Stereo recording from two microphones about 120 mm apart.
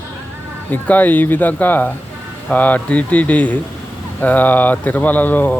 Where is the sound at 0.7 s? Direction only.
15° left (ahead or behind).